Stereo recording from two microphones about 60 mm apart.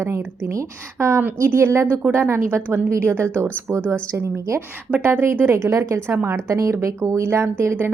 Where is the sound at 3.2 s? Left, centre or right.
Left.